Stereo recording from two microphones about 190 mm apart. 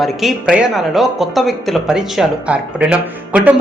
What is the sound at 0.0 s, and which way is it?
Speech, centre (ahead or behind).